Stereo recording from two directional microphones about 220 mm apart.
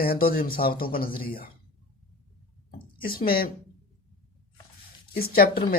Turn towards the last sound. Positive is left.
turn(degrees=40)  # may be behind; listen again after turning